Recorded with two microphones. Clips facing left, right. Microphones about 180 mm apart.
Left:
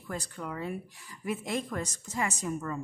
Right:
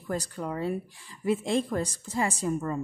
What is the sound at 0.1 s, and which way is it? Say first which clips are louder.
A woman's voice: right 5 dB; 40° right (ahead or behind).